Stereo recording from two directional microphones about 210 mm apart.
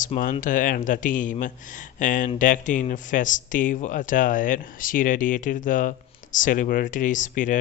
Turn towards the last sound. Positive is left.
turn(degrees=40)  # may be behind; listen again after turning